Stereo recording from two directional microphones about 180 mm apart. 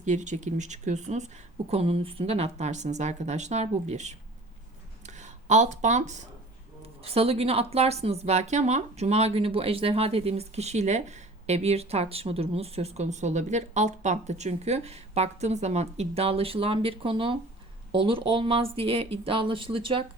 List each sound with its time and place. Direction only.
0.0 s speech: 40° right (ahead or behind)